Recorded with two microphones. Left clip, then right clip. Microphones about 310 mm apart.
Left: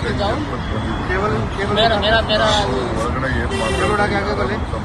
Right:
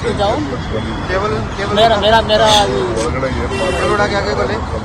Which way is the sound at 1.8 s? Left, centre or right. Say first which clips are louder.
Right 5 dB; centre.